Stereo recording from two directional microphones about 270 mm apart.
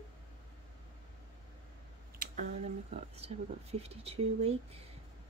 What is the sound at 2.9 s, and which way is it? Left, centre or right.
Speech, right.